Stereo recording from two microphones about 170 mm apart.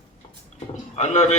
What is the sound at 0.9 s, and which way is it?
Speech, 40° left (ahead or behind).